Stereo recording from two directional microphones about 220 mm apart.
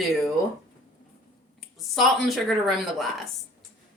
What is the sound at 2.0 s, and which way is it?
Speech, centre (ahead or behind).